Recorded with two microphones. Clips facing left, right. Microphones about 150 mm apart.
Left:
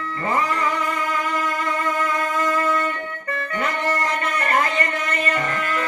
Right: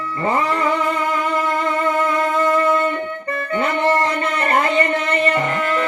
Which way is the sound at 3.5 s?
25° right (ahead or behind).